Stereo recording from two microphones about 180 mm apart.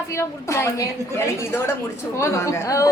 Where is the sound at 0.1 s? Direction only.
15° left (ahead or behind).